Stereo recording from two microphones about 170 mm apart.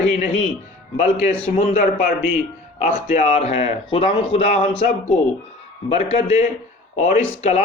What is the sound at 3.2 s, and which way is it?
Speech, 40° left (ahead or behind).